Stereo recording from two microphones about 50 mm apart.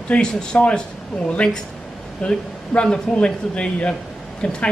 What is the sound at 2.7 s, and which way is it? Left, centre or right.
Speech, centre.